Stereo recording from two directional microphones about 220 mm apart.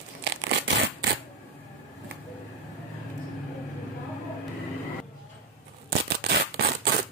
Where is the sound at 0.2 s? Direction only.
60° right (ahead or behind).